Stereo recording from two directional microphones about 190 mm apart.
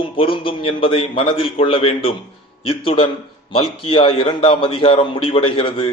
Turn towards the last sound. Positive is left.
turn(degrees=25)  # may be behind; listen again after turning